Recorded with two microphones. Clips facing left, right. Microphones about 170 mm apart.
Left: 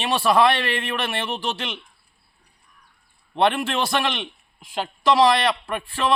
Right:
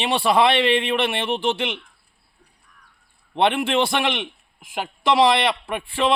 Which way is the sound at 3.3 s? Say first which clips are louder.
Right 2 dB; 20° right (ahead or behind).